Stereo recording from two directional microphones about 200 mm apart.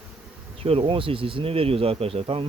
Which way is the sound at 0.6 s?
30° right (ahead or behind).